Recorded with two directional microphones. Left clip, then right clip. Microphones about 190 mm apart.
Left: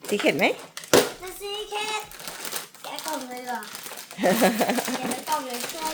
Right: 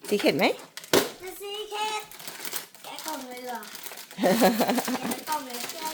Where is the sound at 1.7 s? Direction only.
Centre (ahead or behind).